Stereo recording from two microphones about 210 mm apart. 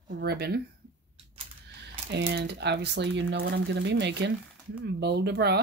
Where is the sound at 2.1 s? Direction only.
55° right (ahead or behind).